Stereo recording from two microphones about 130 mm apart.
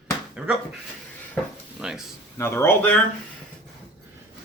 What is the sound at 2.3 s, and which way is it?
Speech, 20° left (ahead or behind).